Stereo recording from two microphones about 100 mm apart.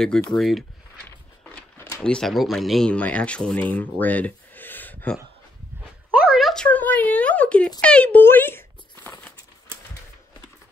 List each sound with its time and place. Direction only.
0.4 s speech: centre (ahead or behind)
1.8 s a sound: 25° left (ahead or behind)
2.0 s speech: 5° left (ahead or behind)
2.9 s speech: 10° left (ahead or behind)
6.1 s a sound: 5° right (ahead or behind)
6.5 s speech: 10° left (ahead or behind)